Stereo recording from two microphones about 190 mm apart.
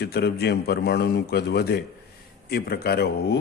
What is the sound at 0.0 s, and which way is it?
A man's voice, 55° left (ahead or behind).